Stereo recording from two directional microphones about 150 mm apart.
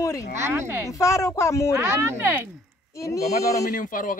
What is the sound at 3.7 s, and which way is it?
Speech, 65° left (ahead or behind).